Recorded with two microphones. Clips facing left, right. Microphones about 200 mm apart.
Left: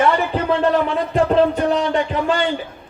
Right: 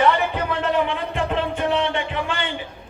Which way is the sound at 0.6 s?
35° left (ahead or behind).